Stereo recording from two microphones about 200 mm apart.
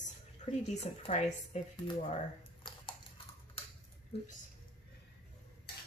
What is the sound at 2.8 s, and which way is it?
Clip-clop, 25° left (ahead or behind).